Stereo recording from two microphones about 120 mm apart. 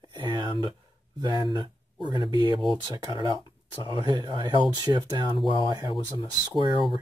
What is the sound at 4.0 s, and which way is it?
Speech, 40° right (ahead or behind).